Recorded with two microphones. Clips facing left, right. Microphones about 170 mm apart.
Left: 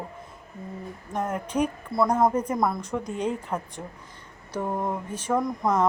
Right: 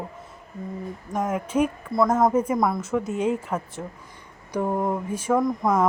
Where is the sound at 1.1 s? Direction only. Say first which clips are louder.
Right 3 dB; 5° right (ahead or behind).